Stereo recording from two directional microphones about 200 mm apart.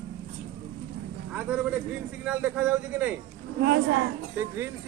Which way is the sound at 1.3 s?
5° right (ahead or behind).